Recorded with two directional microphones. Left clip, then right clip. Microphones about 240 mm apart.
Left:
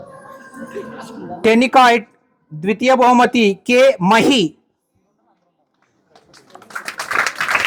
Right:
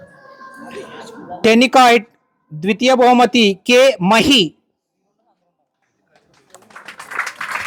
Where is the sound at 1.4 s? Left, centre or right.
Centre.